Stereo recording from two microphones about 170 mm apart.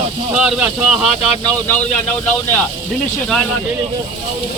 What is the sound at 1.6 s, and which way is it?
Speech, 10° left (ahead or behind).